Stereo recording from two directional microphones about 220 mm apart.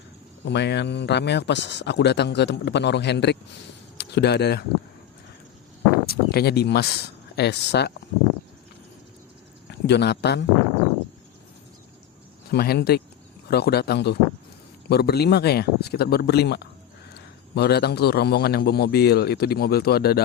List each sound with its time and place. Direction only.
0.4 s speech: 50° left (ahead or behind)
6.1 s speech: 45° left (ahead or behind)
9.7 s speech: 50° left (ahead or behind)
12.5 s speech: 45° left (ahead or behind)